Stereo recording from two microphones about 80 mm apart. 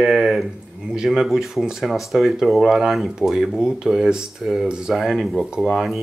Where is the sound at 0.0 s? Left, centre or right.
Centre.